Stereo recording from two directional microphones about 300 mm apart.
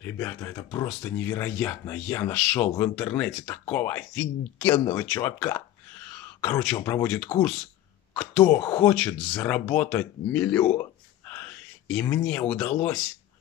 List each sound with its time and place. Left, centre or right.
0.0 s speech: centre
4.7 s speech: centre
11.2 s a sound: centre
12.3 s speech: centre